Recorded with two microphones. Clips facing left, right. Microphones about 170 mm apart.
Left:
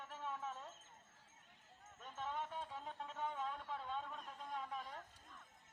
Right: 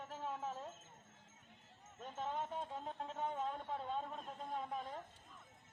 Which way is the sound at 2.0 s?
35° right (ahead or behind).